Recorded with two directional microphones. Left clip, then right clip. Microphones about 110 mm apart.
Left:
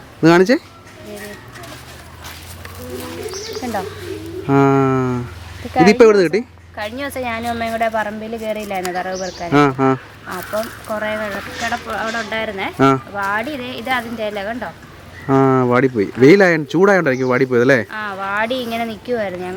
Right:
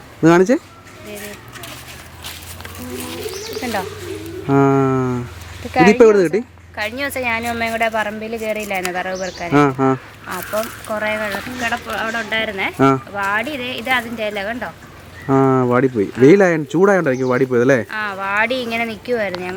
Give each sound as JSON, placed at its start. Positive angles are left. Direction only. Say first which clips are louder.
{"t": 0.2, "sound": "speech", "louder": "left 1 dB", "side_deg": -5}
{"t": 3.6, "sound": "bird", "louder": "right 1 dB", "side_deg": -25}
{"t": 4.4, "sound": "a woman's voice", "louder": "left 1 dB", "side_deg": -5}